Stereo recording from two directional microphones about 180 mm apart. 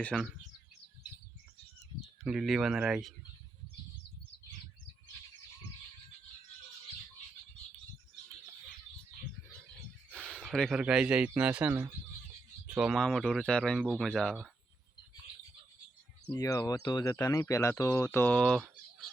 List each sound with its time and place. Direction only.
0.0 s speech: 5° left (ahead or behind)
2.2 s speech: 5° right (ahead or behind)
10.1 s speech: centre (ahead or behind)
16.2 s speech: 20° left (ahead or behind); by 18.7 s 5° left (ahead or behind)